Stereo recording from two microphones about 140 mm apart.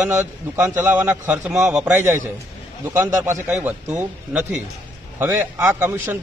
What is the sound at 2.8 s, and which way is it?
Speech, 15° right (ahead or behind).